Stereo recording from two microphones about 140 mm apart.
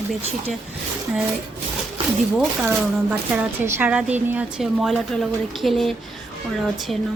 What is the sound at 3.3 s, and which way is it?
A woman's voice, 10° right (ahead or behind).